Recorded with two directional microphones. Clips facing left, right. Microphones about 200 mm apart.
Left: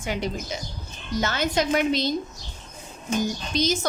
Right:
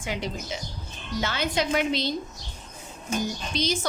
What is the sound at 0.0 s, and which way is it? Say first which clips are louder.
A woman's voice: left 3 dB; 45° left (ahead or behind).